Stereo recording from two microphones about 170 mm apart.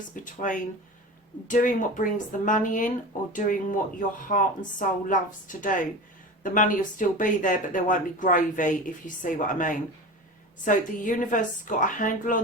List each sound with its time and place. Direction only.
0.3 s speech: 50° left (ahead or behind)